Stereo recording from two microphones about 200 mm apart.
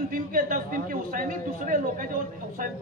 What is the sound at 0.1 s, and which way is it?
A man's voice, 45° right (ahead or behind).